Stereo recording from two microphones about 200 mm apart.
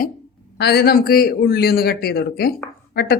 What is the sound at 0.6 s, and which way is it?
A man's voice, 55° left (ahead or behind).